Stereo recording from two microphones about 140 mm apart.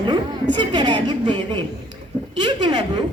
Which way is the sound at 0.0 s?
35° right (ahead or behind).